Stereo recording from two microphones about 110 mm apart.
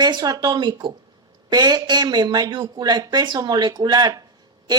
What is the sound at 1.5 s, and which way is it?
Speech, 40° right (ahead or behind).